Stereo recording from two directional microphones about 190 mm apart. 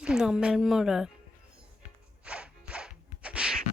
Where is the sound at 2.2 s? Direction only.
5° right (ahead or behind).